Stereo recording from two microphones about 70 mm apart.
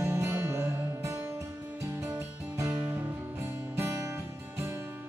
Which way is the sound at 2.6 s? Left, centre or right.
Right.